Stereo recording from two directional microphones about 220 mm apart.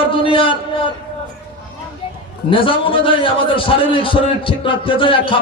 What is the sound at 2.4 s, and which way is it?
A man's voice, 25° left (ahead or behind).